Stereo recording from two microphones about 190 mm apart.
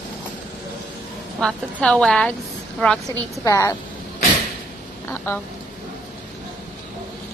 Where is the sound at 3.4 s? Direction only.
15° left (ahead or behind).